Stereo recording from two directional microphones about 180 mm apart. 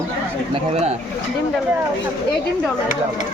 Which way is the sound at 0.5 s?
35° right (ahead or behind).